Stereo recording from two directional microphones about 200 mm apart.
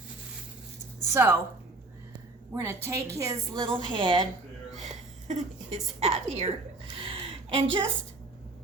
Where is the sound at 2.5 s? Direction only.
15° right (ahead or behind).